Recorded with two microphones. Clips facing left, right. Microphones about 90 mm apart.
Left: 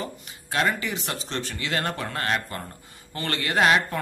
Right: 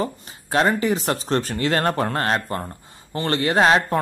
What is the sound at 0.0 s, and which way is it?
Speech, 35° right (ahead or behind).